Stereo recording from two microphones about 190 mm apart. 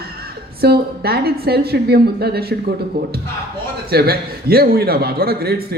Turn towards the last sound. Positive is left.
turn(degrees=-55)  # may be behind; listen again after turning